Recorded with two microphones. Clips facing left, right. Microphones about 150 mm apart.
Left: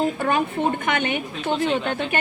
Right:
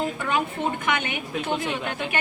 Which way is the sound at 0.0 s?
35° left (ahead or behind).